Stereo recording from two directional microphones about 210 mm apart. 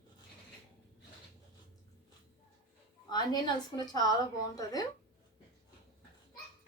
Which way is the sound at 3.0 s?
20° left (ahead or behind).